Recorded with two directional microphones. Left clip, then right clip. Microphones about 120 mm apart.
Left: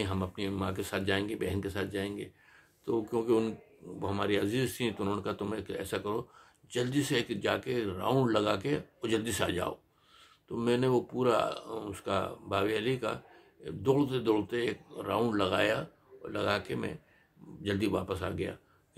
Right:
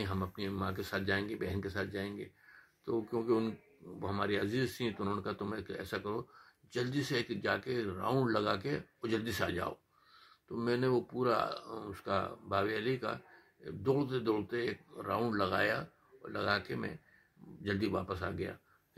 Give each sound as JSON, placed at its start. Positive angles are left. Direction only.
{"t": 0.0, "sound": "speech", "side_deg": 15}